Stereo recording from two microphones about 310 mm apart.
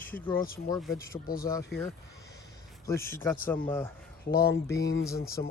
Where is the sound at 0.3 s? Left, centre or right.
Left.